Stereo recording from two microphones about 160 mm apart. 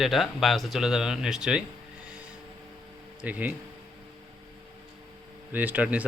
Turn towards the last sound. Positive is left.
turn(degrees=-10)  # may be behind; listen again after turning